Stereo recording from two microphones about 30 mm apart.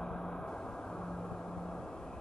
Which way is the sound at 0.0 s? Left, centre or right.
Left.